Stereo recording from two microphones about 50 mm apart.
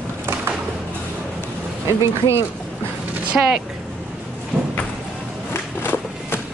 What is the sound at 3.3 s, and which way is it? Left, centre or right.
Speech, centre.